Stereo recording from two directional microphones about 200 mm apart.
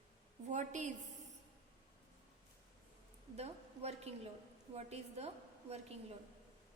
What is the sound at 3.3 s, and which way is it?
A woman's voice, 30° right (ahead or behind).